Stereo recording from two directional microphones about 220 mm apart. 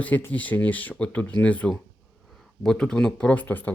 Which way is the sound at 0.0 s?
5° left (ahead or behind).